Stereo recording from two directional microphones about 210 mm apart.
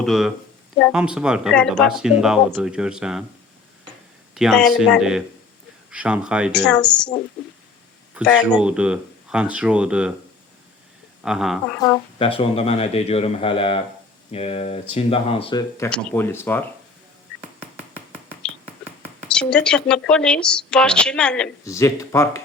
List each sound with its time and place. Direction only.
0.0 s speech: centre (ahead or behind)
4.4 s speech: centre (ahead or behind)
8.1 s speech: 5° left (ahead or behind)
11.2 s speech: centre (ahead or behind)
11.8 s speech: 20° left (ahead or behind)
15.9 s speech: 10° left (ahead or behind)
19.3 s speech: 5° left (ahead or behind)